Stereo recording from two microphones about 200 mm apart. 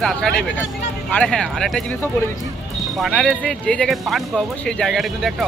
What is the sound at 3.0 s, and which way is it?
Speech, centre (ahead or behind).